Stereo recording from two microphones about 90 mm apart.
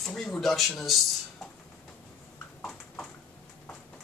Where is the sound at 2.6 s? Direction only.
15° left (ahead or behind).